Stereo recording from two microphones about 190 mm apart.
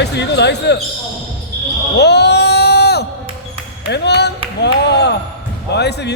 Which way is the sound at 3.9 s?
60° left (ahead or behind).